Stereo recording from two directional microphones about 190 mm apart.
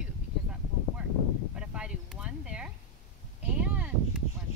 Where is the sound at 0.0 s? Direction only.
5° right (ahead or behind).